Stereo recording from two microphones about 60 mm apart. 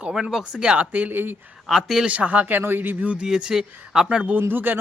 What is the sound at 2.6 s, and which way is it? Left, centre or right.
Speech, right.